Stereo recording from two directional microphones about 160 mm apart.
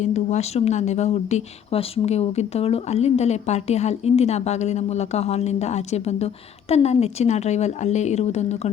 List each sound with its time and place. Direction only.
0.0 s speech: 45° left (ahead or behind)